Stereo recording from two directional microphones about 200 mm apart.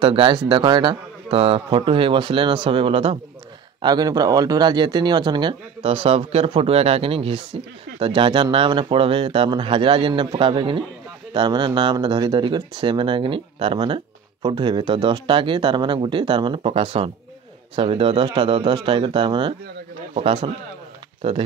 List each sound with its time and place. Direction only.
0.0 s speech: 25° right (ahead or behind)